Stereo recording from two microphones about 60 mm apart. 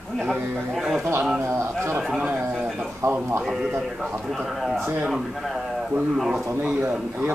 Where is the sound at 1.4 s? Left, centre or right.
Right.